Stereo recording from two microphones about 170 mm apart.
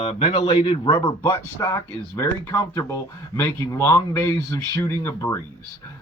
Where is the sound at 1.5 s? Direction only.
20° left (ahead or behind).